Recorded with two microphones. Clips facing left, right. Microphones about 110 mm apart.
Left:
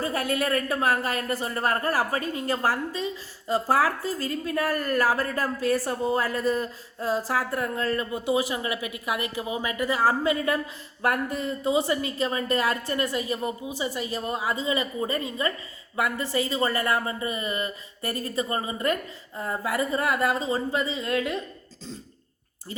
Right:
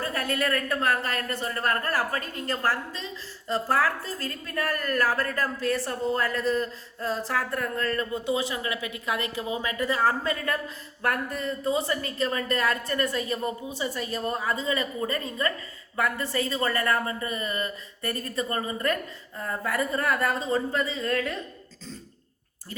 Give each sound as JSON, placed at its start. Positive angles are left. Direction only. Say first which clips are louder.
{"t": 0.0, "sound": "a woman's voice", "louder": "left 2 dB", "side_deg": 15}
{"t": 19.7, "sound": "a woman's voice", "louder": "left 1 dB", "side_deg": 10}